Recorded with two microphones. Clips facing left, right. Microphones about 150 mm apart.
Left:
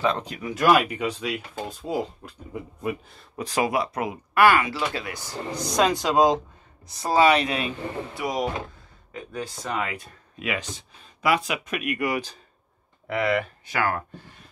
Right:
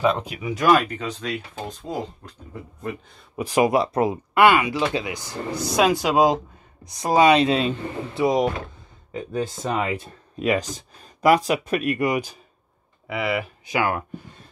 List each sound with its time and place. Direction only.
0.0 s speech: 10° right (ahead or behind); by 3.0 s 10° left (ahead or behind)
3.3 s speech: 15° right (ahead or behind)
3.7 s speech: 30° right (ahead or behind)
12.1 s speech: 10° right (ahead or behind)